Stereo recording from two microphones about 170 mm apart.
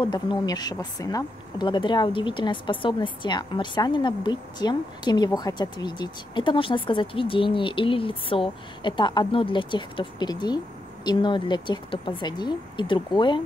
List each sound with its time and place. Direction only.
0.0 s speech: 25° left (ahead or behind)